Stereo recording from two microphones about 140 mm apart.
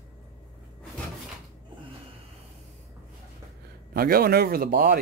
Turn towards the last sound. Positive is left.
turn(degrees=-90)